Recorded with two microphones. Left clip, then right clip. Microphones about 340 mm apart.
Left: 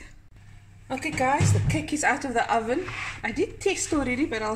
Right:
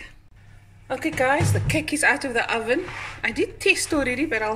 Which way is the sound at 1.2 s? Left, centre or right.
Right.